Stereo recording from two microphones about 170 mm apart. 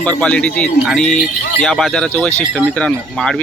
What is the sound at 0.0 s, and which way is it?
Speech, 10° left (ahead or behind).